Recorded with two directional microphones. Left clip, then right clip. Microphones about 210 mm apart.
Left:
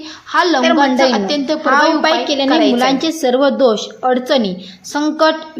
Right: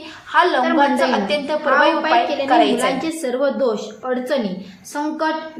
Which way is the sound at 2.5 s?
70° left (ahead or behind).